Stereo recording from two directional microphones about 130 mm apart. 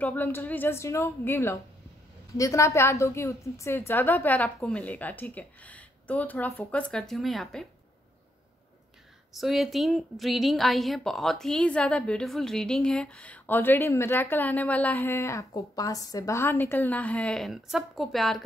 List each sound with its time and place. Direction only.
0.0 s a woman's voice: 15° left (ahead or behind)
9.3 s a woman's voice: centre (ahead or behind)